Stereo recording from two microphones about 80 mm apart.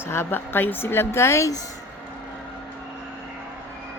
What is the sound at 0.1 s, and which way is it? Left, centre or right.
A woman's voice, left.